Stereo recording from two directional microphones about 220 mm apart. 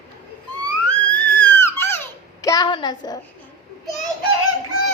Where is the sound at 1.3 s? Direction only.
10° left (ahead or behind).